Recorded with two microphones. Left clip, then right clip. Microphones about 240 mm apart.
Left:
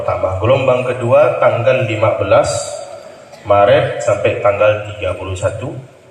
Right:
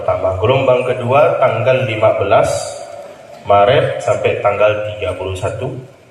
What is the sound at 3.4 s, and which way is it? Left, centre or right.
A man's voice, right.